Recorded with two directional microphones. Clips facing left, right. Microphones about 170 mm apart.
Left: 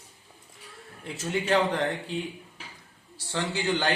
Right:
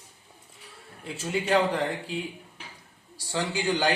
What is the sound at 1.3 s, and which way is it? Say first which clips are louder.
Speech: right 1 dB; 10° right (ahead or behind).